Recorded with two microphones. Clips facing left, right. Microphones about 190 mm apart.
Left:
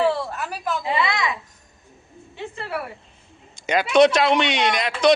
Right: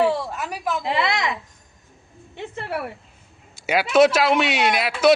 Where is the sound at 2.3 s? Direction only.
60° right (ahead or behind).